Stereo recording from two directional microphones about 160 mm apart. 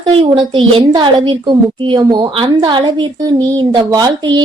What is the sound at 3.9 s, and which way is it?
Speech, 25° right (ahead or behind).